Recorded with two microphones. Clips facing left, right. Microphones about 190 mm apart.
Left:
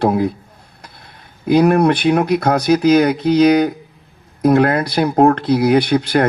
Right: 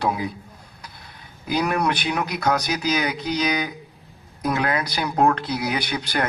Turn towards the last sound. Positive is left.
turn(degrees=55)  # may be behind; listen again after turning